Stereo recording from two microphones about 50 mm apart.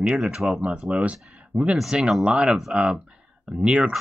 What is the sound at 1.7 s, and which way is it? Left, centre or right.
Speech, centre.